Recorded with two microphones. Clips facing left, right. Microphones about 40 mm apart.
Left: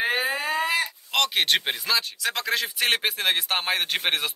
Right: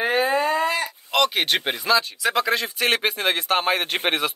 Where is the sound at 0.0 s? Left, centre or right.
Centre.